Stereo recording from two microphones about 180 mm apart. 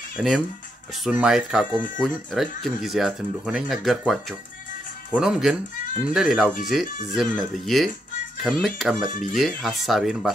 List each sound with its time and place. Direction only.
0.2 s speech: 5° right (ahead or behind)